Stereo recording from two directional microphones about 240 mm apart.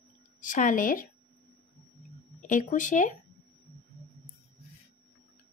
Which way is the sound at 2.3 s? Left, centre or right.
Left.